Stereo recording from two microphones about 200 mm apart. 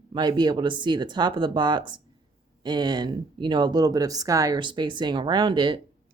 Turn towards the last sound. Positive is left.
turn(degrees=-25)  # may be behind; listen again after turning